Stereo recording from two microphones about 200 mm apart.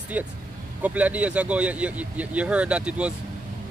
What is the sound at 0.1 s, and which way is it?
Speech, 5° right (ahead or behind).